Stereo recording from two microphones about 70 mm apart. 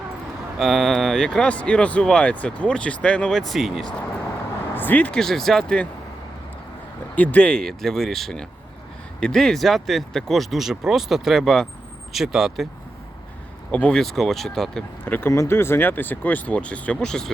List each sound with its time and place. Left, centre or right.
0.6 s speech: centre
4.7 s speech: left
5.1 s speech: centre
7.2 s speech: centre
12.1 s speech: centre
13.7 s speech: centre
14.0 s speech: centre
15.0 s speech: left; by 17.3 s centre